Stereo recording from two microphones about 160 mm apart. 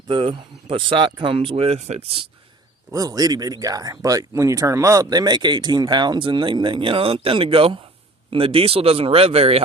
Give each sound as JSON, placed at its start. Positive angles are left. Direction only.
{"t": 0.1, "sound": "speech", "side_deg": -30}
{"t": 2.9, "sound": "speech", "side_deg": -25}